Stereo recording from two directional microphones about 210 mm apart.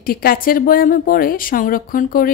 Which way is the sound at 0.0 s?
45° left (ahead or behind).